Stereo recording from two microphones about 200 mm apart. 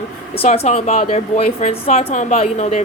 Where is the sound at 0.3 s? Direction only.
30° left (ahead or behind).